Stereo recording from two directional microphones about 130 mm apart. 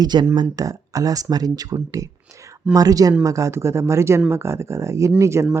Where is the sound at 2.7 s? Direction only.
30° right (ahead or behind).